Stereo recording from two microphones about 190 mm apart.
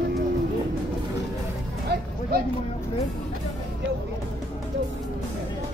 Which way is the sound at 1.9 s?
55° right (ahead or behind).